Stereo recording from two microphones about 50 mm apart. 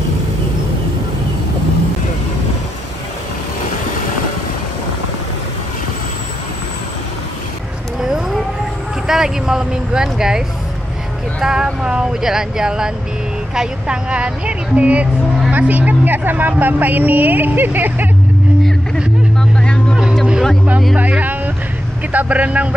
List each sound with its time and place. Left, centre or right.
8.0 s a sound: centre
9.0 s speech: centre
11.4 s speech: centre; by 18.0 s right
19.5 s vehicle: centre
22.1 s speech: right